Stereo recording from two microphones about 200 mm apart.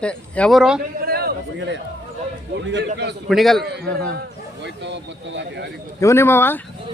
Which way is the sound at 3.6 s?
55° right (ahead or behind).